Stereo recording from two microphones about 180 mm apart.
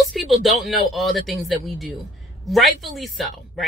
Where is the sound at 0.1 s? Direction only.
Centre (ahead or behind).